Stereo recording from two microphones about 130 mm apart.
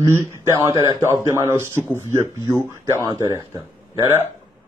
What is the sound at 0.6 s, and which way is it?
Speech, 30° right (ahead or behind).